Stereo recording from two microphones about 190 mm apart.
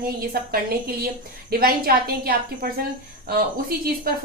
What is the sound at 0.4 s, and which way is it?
A woman's voice, 55° right (ahead or behind).